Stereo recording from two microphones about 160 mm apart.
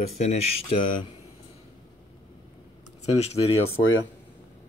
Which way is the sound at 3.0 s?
40° left (ahead or behind).